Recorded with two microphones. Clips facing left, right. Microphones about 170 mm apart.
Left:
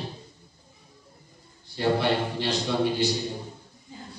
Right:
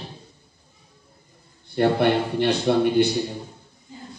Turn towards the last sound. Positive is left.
turn(degrees=-55)  # may be behind; listen again after turning